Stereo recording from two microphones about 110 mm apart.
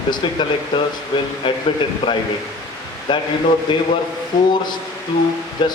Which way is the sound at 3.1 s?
45° left (ahead or behind).